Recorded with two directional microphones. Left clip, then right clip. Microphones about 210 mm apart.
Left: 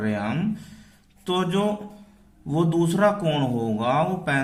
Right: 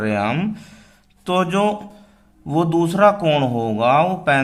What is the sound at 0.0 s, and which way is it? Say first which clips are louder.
A man's voice: right 7 dB; 30° right (ahead or behind).